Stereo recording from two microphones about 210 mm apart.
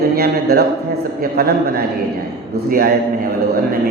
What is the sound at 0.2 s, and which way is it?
A man's voice, 45° right (ahead or behind).